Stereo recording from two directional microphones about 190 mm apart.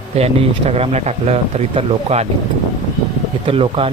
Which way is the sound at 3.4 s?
30° right (ahead or behind).